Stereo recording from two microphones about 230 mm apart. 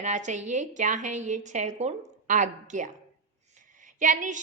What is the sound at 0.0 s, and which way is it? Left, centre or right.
A woman's voice, right.